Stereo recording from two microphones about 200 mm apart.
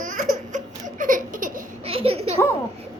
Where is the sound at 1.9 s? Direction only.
30° right (ahead or behind).